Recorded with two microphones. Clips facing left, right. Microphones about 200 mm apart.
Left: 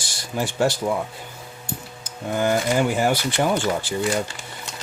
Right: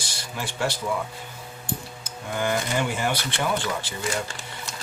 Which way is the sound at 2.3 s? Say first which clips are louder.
Left 5 dB; 40° left (ahead or behind).